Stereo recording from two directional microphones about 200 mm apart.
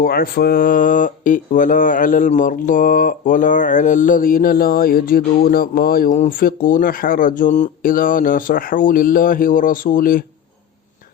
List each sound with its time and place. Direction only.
0.0 s mantra: 45° left (ahead or behind)